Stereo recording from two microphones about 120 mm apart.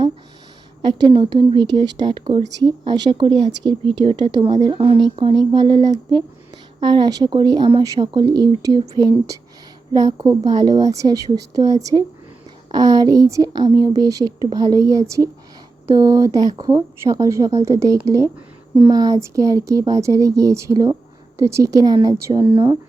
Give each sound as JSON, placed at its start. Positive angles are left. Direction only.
{"t": 0.8, "sound": "speech", "side_deg": -35}
{"t": 2.5, "sound": "speech", "side_deg": -35}
{"t": 6.8, "sound": "speech", "side_deg": -35}